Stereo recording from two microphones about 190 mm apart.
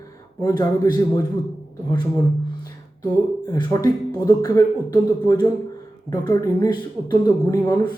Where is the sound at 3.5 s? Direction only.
20° left (ahead or behind).